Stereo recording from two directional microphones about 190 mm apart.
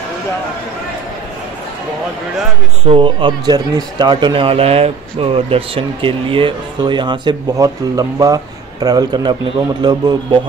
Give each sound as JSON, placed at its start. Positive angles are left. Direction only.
{"t": 2.8, "sound": "speech", "side_deg": -25}